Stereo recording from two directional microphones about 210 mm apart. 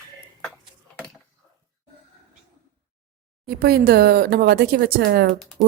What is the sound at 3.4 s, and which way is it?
Speech, 50° right (ahead or behind).